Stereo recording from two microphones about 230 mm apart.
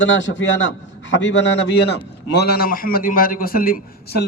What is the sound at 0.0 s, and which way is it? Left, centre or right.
A man's voice, left.